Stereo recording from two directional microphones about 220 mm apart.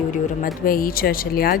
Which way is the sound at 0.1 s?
40° left (ahead or behind).